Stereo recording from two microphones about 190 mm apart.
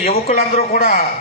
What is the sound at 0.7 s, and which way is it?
Speech, 50° left (ahead or behind).